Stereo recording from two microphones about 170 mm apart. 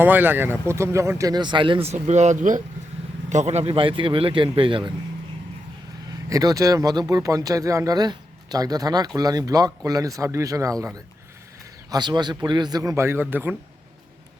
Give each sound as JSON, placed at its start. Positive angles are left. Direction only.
{"t": 0.0, "sound": "speech", "side_deg": -10}
{"t": 6.2, "sound": "speech", "side_deg": -20}